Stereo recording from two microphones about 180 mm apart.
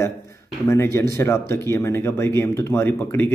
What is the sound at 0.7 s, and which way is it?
A man's voice, 15° left (ahead or behind).